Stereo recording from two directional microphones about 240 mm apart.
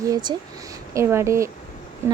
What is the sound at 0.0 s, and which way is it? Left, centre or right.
A woman's voice, centre.